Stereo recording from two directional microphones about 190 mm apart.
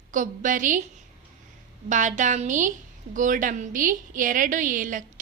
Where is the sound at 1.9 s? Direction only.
40° right (ahead or behind).